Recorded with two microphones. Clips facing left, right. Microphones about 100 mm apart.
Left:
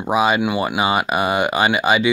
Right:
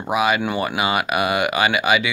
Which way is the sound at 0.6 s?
25° left (ahead or behind).